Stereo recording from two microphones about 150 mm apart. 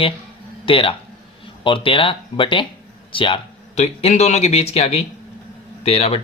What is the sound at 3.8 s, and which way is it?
A man's voice, 45° left (ahead or behind).